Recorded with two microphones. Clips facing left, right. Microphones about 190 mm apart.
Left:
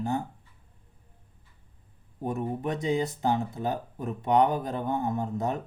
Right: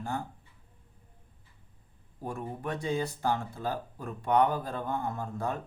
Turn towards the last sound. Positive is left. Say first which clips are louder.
# left 5 dB
turn(degrees=20)  # may be behind; listen again after turning